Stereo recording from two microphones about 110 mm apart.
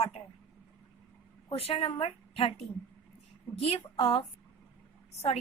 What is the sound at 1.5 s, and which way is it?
A woman's voice, 65° left (ahead or behind).